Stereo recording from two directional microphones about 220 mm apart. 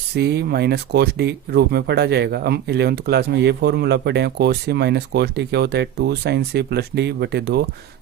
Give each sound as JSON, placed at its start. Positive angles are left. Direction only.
{"t": 0.1, "sound": "speech", "side_deg": -50}